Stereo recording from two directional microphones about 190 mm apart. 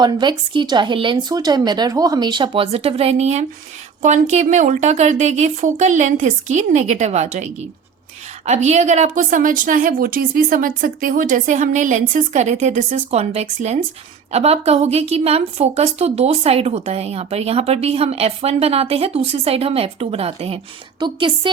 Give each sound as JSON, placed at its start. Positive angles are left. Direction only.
{"t": 0.0, "sound": "a woman's voice", "side_deg": -25}